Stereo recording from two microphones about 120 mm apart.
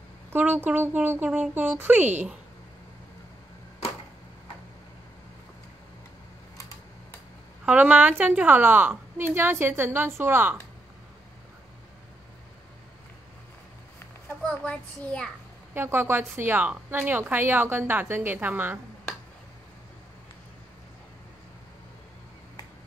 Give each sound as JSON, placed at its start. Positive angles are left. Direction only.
{"t": 0.3, "sound": "a woman's voice", "side_deg": -15}
{"t": 7.6, "sound": "a woman's voice", "side_deg": -10}
{"t": 14.5, "sound": "a child's voice", "side_deg": 10}
{"t": 15.7, "sound": "a woman's voice", "side_deg": -20}